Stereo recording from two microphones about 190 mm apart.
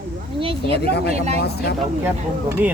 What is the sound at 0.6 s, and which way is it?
Speech, 60° left (ahead or behind).